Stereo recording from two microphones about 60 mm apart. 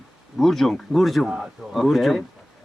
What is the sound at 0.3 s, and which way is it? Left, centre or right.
Speech, centre.